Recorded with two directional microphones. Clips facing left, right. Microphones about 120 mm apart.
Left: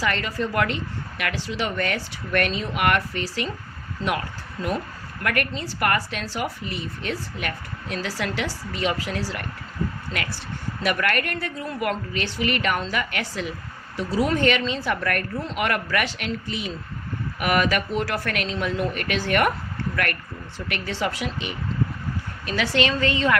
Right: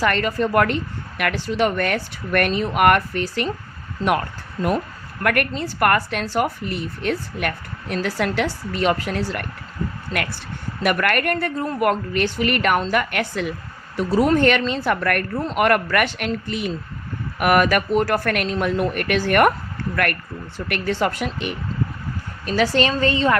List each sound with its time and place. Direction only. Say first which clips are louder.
0.0 s a woman's voice: right 5 dB; 55° right (ahead or behind)
4.6 s a woman's voice: right 5 dB; 40° right (ahead or behind)
5.2 s a woman's voice: right 5 dB; 55° right (ahead or behind)
10.8 s a woman's voice: right 5 dB; 55° right (ahead or behind)
20.7 s a woman's voice: right 5 dB; 55° right (ahead or behind)
22.4 s a woman's voice: right 4 dB; 40° right (ahead or behind)